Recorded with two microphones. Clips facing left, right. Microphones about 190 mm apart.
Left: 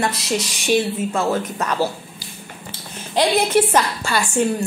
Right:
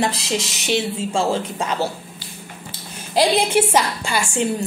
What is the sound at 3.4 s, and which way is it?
Speech, 10° right (ahead or behind).